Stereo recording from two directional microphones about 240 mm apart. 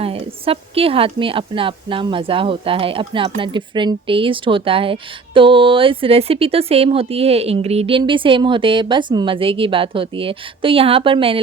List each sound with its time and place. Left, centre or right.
0.0 s a woman's voice: right